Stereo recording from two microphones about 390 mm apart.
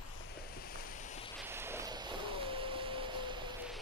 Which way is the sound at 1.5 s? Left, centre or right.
Centre.